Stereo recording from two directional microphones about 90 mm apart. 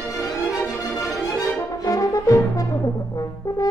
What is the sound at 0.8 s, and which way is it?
Music, 10° left (ahead or behind).